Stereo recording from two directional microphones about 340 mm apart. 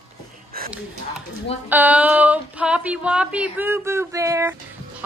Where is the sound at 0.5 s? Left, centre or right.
Right.